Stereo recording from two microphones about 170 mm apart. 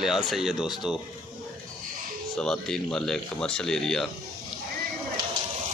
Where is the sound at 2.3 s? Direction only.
5° left (ahead or behind).